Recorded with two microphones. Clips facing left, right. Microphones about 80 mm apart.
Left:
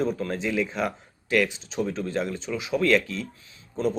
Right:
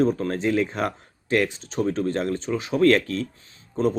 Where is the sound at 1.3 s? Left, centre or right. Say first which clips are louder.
Right 1 dB; right.